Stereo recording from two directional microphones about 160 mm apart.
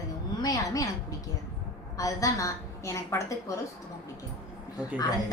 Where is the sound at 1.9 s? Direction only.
20° left (ahead or behind).